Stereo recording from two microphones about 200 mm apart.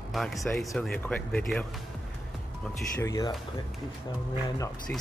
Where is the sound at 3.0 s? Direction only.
15° left (ahead or behind).